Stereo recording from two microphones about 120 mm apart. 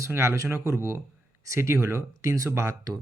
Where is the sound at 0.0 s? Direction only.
25° right (ahead or behind).